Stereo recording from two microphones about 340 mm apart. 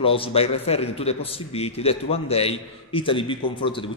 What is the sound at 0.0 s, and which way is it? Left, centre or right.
A man's voice, centre.